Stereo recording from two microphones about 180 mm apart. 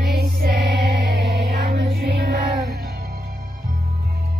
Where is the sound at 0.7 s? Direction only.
70° right (ahead or behind).